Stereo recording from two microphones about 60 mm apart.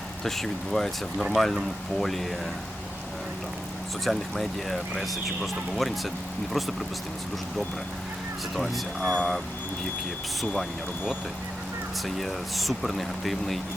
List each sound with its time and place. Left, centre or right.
0.3 s speech: centre
4.0 s speech: centre
9.0 s speech: left
12.0 s speech: centre